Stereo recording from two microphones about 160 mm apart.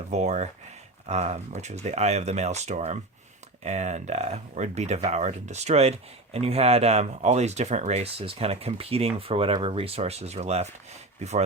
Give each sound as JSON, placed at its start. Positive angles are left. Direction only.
{"t": 0.1, "sound": "speech", "side_deg": -45}